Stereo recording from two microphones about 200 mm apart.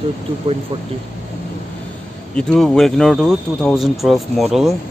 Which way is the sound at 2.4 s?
Centre (ahead or behind).